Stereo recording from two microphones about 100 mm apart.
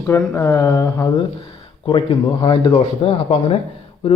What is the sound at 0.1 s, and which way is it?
Speech, 25° left (ahead or behind).